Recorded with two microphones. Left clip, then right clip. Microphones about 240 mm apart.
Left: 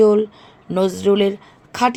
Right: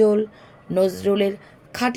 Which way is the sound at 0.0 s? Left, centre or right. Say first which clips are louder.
Left 4 dB; left.